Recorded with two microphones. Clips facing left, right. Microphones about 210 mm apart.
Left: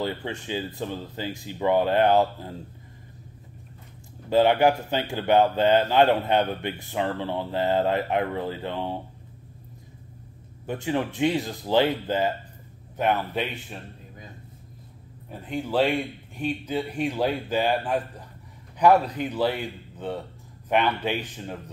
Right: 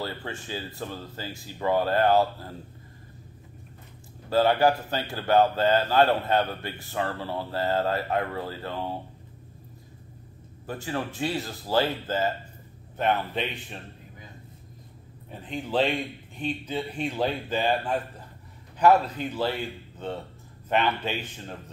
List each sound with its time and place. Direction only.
0.0 s a man's voice: 20° left (ahead or behind)
4.3 s a man's voice: 20° left (ahead or behind)
10.7 s a man's voice: 20° left (ahead or behind)
15.4 s speech: 10° left (ahead or behind)
20.7 s speech: 15° left (ahead or behind)